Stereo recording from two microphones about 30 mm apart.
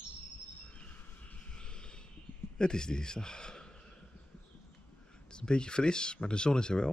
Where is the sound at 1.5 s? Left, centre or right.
Left.